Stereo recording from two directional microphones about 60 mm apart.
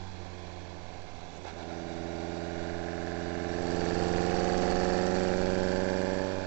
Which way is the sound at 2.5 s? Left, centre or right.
Right.